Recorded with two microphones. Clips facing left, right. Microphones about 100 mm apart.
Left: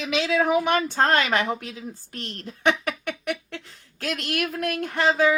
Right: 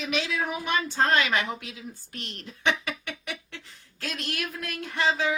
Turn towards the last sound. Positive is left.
turn(degrees=50)  # may be behind; listen again after turning